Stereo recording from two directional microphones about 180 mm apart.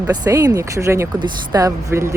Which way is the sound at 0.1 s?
20° right (ahead or behind).